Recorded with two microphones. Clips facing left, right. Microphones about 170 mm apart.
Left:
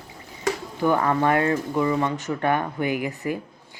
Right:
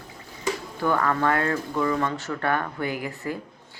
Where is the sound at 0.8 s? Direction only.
20° left (ahead or behind).